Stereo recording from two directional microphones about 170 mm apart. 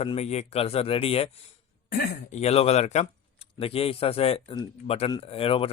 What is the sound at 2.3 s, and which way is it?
Speech, 40° left (ahead or behind).